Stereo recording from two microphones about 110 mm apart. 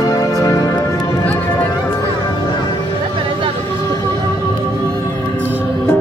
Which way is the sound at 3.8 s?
30° left (ahead or behind).